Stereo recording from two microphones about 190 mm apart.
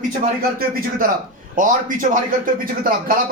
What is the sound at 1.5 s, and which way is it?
A man's voice, 45° right (ahead or behind).